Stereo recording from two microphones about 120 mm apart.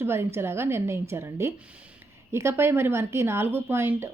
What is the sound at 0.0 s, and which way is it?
A woman's voice, 20° right (ahead or behind).